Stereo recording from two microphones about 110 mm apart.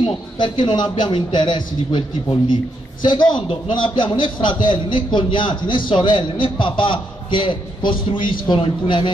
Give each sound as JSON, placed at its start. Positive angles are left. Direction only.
{"t": 0.4, "sound": "a man's voice", "side_deg": 45}